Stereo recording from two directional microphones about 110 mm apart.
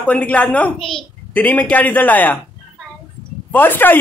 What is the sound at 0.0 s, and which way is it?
A woman's voice, 10° left (ahead or behind).